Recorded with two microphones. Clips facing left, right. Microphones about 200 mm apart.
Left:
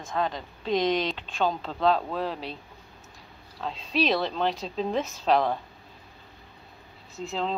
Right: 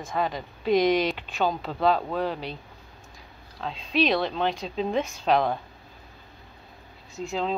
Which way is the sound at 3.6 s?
Centre (ahead or behind).